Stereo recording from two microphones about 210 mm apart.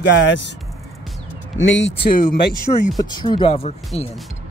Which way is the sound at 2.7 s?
25° left (ahead or behind).